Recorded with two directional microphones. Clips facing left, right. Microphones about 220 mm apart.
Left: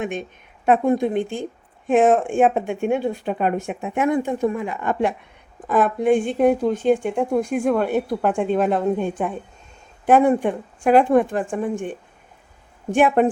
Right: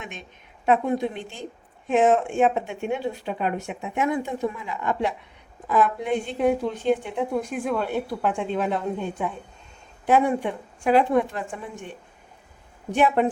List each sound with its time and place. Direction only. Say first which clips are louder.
0.0 s a woman's voice: left 12 dB; 50° left (ahead or behind)